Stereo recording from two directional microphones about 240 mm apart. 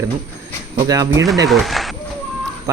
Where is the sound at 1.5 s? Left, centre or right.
Centre.